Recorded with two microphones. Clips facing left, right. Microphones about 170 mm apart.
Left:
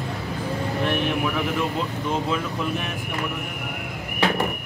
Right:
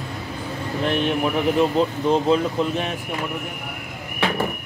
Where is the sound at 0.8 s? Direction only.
35° right (ahead or behind).